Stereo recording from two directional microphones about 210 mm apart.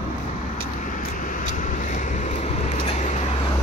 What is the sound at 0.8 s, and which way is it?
Vehicle, 40° left (ahead or behind).